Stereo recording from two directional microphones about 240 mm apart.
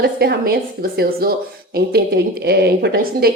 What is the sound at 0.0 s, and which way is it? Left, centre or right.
Speech, right.